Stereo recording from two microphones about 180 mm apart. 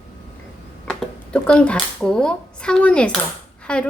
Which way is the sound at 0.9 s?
5° left (ahead or behind).